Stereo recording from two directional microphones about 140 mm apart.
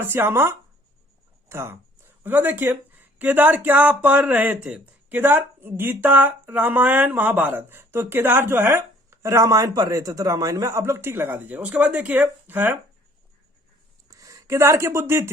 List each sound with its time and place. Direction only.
0.0 s speech: 15° right (ahead or behind)
14.1 s speech: 25° right (ahead or behind)